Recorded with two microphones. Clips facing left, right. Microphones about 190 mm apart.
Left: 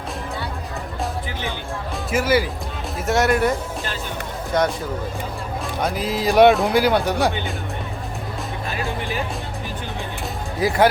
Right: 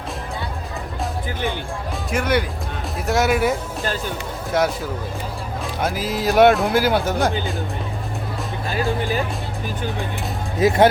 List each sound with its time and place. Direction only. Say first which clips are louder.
2.0 s speech: left 2 dB; 5° left (ahead or behind)
4.5 s speech: even; 5° right (ahead or behind)
5.8 s speech: even; 5° right (ahead or behind)
10.6 s speech: right 3 dB; 20° right (ahead or behind)